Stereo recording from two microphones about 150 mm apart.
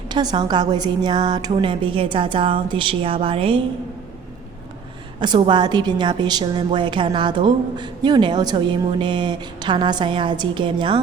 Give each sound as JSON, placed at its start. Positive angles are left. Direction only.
{"t": 0.1, "sound": "a woman's voice", "side_deg": -30}
{"t": 5.2, "sound": "a woman's voice", "side_deg": -30}